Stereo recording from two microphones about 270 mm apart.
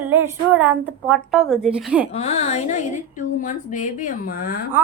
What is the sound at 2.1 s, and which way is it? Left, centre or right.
A woman's voice, left.